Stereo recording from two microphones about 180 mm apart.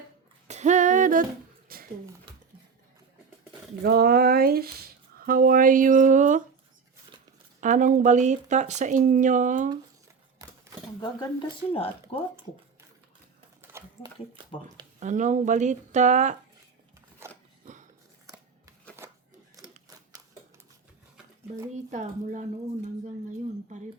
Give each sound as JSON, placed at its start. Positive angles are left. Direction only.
{"t": 0.4, "sound": "humming", "side_deg": -40}
{"t": 1.7, "sound": "a sound", "side_deg": -55}
{"t": 3.8, "sound": "speech", "side_deg": -60}
{"t": 7.6, "sound": "speech", "side_deg": -45}
{"t": 10.4, "sound": "a sound", "side_deg": -20}
{"t": 11.0, "sound": "speech", "side_deg": 25}
{"t": 13.6, "sound": "a sound", "side_deg": -15}
{"t": 14.9, "sound": "speech", "side_deg": -45}
{"t": 19.6, "sound": "typewriter", "side_deg": -20}
{"t": 21.8, "sound": "speech", "side_deg": -45}